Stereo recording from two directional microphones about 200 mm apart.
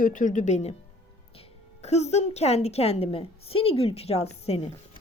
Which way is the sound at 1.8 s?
35° left (ahead or behind).